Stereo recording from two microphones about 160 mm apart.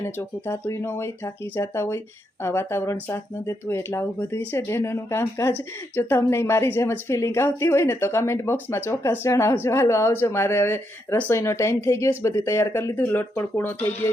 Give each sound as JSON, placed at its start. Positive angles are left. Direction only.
{"t": 0.0, "sound": "speech", "side_deg": 15}